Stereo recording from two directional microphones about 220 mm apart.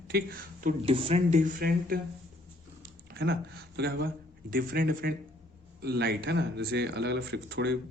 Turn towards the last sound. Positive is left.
turn(degrees=-50)  # may be behind; listen again after turning